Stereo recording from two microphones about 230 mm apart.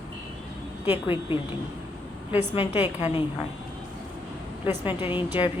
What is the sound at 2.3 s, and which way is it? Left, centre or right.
Speech, centre.